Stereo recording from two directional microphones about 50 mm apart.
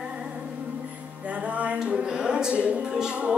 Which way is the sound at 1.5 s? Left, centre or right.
Right.